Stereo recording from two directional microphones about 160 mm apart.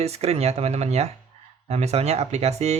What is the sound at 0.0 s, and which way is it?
Speech, 40° right (ahead or behind).